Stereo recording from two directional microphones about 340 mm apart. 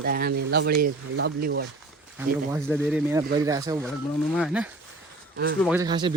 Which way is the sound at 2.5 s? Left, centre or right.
Centre.